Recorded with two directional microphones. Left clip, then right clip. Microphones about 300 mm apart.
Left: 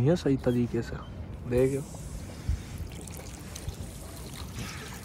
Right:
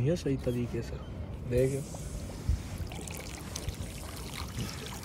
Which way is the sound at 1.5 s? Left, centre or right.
Centre.